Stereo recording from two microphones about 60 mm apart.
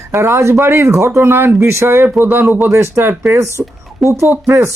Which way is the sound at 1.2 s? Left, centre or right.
Right.